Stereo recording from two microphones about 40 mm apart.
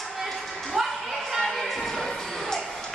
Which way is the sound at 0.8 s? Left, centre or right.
Centre.